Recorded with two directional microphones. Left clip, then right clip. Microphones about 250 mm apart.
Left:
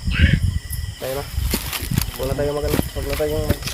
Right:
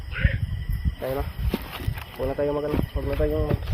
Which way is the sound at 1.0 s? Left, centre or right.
Centre.